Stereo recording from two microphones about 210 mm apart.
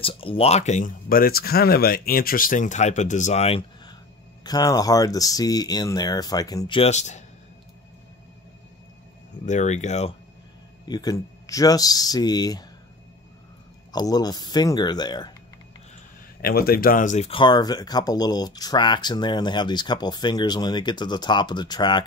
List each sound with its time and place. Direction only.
0.0 s speech: 25° left (ahead or behind)
6.8 s speech: 35° left (ahead or behind)
9.5 s speech: 35° left (ahead or behind)
10.9 s speech: 15° left (ahead or behind)
13.9 s speech: 20° left (ahead or behind)
16.3 s speech: 45° left (ahead or behind); by 22.0 s 20° left (ahead or behind)